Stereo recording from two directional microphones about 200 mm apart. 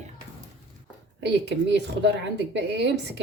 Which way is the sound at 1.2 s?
60° right (ahead or behind).